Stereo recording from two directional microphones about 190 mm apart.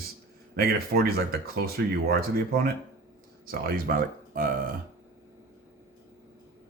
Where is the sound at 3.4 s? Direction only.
50° right (ahead or behind).